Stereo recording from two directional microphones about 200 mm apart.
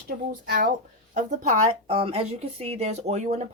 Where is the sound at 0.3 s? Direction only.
45° right (ahead or behind).